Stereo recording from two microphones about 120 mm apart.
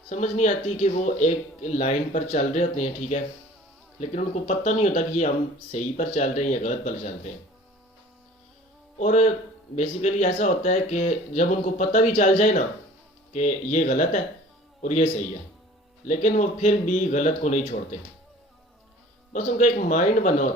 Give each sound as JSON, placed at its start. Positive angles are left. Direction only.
{"t": 0.1, "sound": "speech", "side_deg": 75}
{"t": 9.0, "sound": "a man's voice", "side_deg": 80}
{"t": 16.0, "sound": "speech", "side_deg": 90}
{"t": 19.3, "sound": "speech", "side_deg": 90}